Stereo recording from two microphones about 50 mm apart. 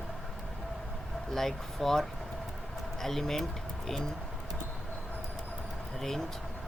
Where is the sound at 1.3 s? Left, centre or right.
Centre.